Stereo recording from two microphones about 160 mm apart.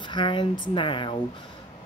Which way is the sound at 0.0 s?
30° left (ahead or behind).